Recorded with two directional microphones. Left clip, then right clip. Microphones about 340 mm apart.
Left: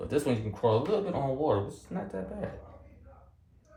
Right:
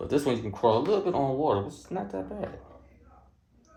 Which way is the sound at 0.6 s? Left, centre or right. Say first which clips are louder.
Right 3 dB; right.